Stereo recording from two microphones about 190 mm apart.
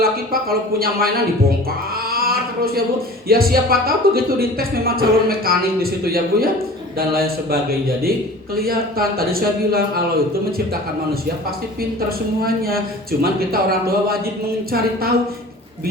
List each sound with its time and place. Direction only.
0.0 s speech: 50° right (ahead or behind)
2.0 s a sound: 50° right (ahead or behind)
3.2 s speech: 50° right (ahead or behind)
11.8 s speech: 50° right (ahead or behind)